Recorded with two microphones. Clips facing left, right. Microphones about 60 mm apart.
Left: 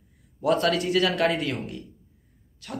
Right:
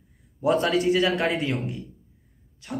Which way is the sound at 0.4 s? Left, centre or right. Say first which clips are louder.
Right 1 dB; right.